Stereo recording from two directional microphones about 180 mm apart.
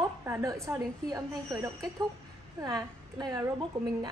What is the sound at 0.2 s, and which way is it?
A woman's voice, 15° right (ahead or behind).